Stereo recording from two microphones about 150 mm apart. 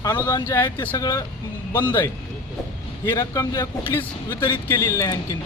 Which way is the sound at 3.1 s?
20° left (ahead or behind).